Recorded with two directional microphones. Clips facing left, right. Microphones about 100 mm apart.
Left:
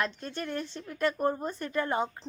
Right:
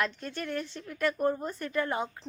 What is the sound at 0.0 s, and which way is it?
Speech, 25° left (ahead or behind).